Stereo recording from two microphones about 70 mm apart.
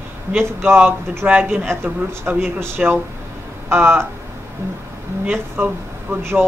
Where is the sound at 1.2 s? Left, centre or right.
Right.